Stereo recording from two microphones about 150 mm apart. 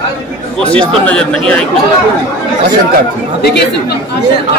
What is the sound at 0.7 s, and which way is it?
Speech, 10° left (ahead or behind).